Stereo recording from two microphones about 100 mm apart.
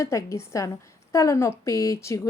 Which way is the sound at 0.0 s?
30° left (ahead or behind).